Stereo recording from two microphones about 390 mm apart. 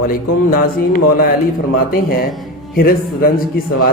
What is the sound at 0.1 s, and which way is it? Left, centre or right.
A man's voice, left.